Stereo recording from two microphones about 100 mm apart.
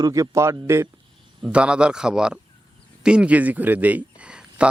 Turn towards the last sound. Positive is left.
turn(degrees=-10)  # may be behind; listen again after turning